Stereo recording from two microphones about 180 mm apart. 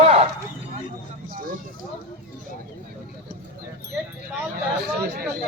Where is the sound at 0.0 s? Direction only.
35° right (ahead or behind).